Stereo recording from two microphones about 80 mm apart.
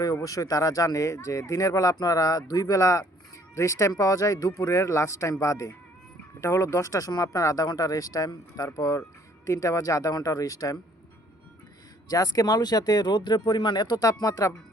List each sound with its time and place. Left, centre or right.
0.0 s speech: left
12.0 s speech: left